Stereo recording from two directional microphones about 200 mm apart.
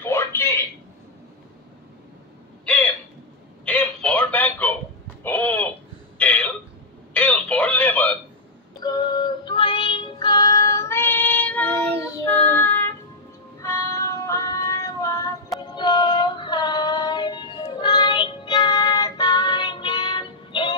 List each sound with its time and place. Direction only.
0.0 s a sound: 15° left (ahead or behind)
2.6 s a sound: 5° left (ahead or behind)
7.2 s telephone: 5° left (ahead or behind)
8.7 s music: 20° left (ahead or behind)
12.3 s child singing: 10° left (ahead or behind)
13.6 s cat: 15° left (ahead or behind)
15.6 s female singing: 20° left (ahead or behind)